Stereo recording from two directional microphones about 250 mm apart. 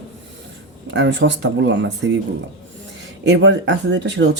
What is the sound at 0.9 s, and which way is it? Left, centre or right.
Speech, right.